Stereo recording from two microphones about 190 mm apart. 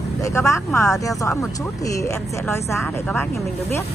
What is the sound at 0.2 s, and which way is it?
A woman's voice, 15° left (ahead or behind).